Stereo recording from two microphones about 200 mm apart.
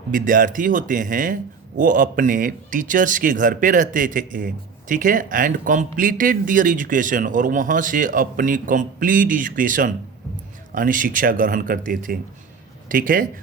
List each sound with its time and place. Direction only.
0.1 s speech: 45° right (ahead or behind)